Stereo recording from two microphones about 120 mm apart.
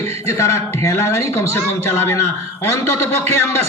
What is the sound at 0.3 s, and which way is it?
A man's voice, 25° left (ahead or behind).